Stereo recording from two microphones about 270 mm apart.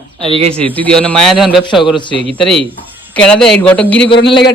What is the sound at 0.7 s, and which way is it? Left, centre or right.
A woman's voice, centre.